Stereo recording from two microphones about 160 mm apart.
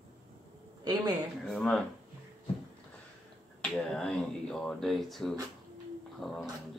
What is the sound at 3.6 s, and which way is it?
Speech, 5° left (ahead or behind).